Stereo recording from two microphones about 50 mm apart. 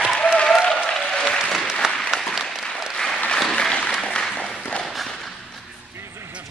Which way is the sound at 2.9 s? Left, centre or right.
Centre.